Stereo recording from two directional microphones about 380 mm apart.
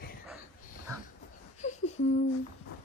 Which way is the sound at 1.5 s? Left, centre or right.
Centre.